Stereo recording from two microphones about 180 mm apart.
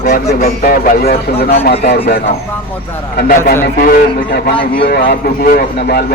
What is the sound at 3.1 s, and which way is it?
A man's voice, 60° left (ahead or behind).